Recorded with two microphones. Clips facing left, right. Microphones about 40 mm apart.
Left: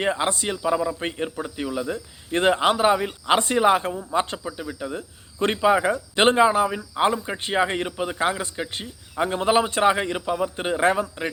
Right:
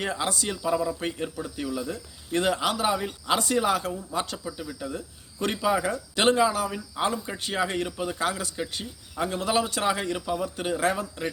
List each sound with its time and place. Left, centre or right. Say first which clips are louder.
0.0 s speech: left 5 dB; left